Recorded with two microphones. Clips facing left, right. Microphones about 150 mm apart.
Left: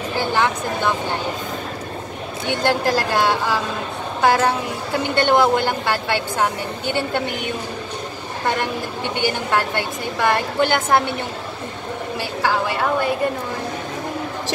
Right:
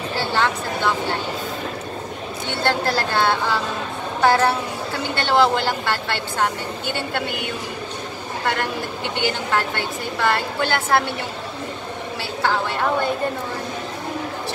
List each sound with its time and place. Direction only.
0.1 s a sound: 15° left (ahead or behind)
2.4 s a woman's voice: 15° left (ahead or behind)
9.2 s a woman's voice: 15° left (ahead or behind)
12.4 s a woman's voice: 10° left (ahead or behind)